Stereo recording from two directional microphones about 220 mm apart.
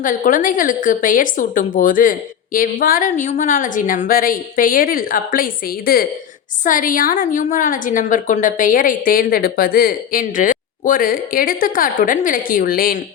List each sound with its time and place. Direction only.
0.0 s a woman's voice: 35° left (ahead or behind)